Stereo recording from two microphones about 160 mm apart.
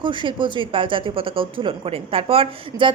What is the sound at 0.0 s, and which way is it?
Speech, 30° right (ahead or behind).